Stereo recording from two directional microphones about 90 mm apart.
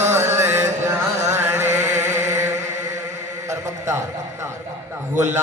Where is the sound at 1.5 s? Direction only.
30° right (ahead or behind).